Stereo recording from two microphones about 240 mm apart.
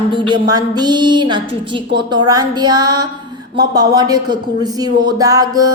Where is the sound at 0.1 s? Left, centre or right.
Centre.